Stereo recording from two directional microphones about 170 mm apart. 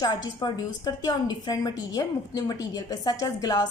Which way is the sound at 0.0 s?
25° left (ahead or behind).